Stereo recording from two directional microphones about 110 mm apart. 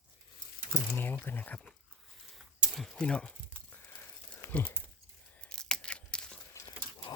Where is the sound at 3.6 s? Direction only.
15° left (ahead or behind).